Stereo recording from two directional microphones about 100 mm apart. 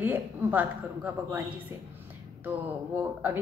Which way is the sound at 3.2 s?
15° right (ahead or behind).